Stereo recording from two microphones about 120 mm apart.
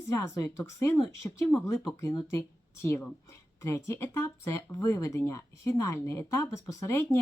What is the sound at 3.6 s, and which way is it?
Speech, 25° left (ahead or behind).